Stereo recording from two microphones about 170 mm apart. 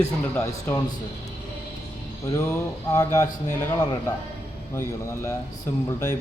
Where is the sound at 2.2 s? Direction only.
20° left (ahead or behind).